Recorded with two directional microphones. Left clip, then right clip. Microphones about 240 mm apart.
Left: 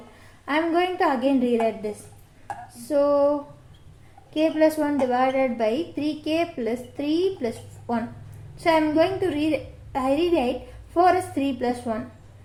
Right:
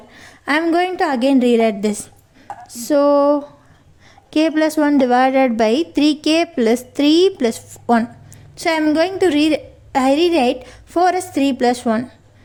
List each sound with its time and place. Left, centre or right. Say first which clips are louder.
0.4 s a woman's voice: right 6 dB; right